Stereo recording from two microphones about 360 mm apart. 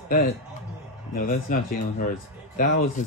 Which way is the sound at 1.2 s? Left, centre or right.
Left.